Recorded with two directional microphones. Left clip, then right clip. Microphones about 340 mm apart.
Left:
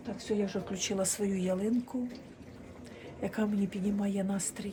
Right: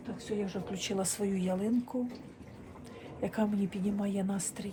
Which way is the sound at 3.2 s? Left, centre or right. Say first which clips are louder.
Right 1 dB; centre.